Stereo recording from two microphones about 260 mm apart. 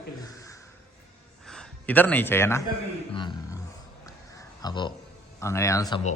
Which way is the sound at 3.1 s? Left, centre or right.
Centre.